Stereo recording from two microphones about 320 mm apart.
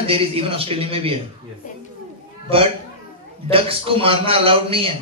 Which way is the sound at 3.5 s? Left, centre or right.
Centre.